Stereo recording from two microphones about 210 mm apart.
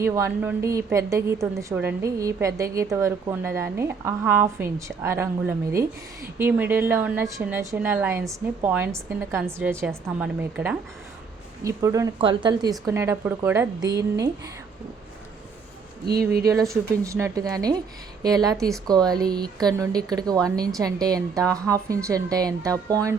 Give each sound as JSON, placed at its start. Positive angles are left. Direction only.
{"t": 0.0, "sound": "a woman's voice", "side_deg": -15}
{"t": 16.0, "sound": "speech", "side_deg": -45}
{"t": 16.6, "sound": "a woman's voice", "side_deg": -15}